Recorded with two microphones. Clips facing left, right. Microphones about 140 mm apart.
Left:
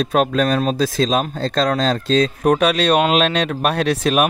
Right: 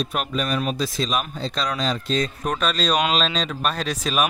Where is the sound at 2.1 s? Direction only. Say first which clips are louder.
Left 9 dB; 65° left (ahead or behind).